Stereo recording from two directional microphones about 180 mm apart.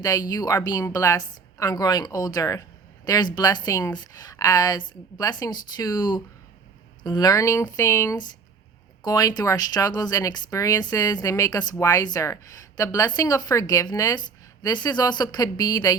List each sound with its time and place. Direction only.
0.0 s a woman's voice: 20° left (ahead or behind)